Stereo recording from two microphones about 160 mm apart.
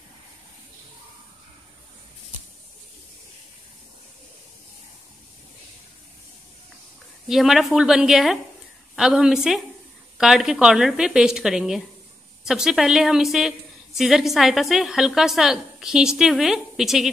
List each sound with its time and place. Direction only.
7.2 s a woman's voice: centre (ahead or behind)